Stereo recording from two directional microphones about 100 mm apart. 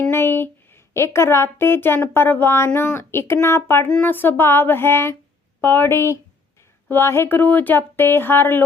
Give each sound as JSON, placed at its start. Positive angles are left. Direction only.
{"t": 0.1, "sound": "a woman's voice", "side_deg": 20}